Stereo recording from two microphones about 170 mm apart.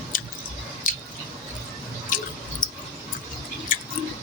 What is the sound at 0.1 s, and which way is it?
Squish, 55° left (ahead or behind).